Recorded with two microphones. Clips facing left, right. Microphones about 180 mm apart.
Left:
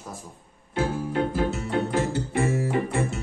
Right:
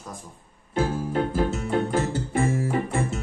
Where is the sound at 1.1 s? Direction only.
45° right (ahead or behind).